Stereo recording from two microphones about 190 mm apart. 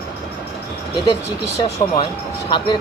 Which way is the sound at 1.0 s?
20° left (ahead or behind).